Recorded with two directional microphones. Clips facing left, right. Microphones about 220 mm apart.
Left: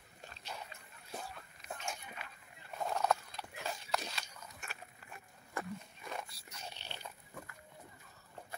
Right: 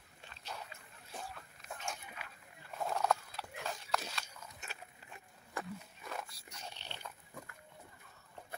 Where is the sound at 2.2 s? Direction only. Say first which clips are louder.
Left 1 dB; 10° right (ahead or behind).